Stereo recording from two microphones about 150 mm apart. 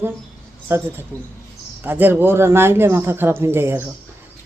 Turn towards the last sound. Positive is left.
turn(degrees=-15)  # may be behind; listen again after turning